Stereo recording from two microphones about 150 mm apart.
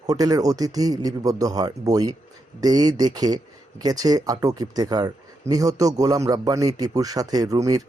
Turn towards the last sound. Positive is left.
turn(degrees=-25)  # may be behind; listen again after turning